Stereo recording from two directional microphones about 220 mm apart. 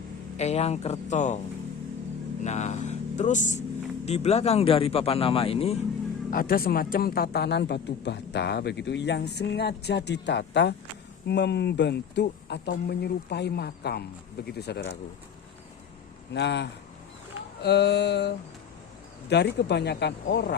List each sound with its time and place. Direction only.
0.3 s speech: 30° left (ahead or behind)
2.4 s speech: 30° left (ahead or behind)
6.3 s a man's voice: 40° left (ahead or behind)
16.3 s a man's voice: 50° left (ahead or behind)